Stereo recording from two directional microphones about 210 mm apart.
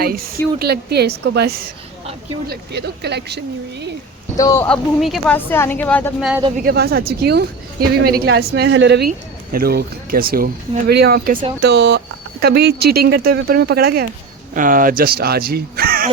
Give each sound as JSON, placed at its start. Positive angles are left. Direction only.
{"t": 0.6, "sound": "a woman's voice", "side_deg": -50}
{"t": 4.4, "sound": "speech", "side_deg": 15}
{"t": 6.6, "sound": "a woman's voice", "side_deg": -45}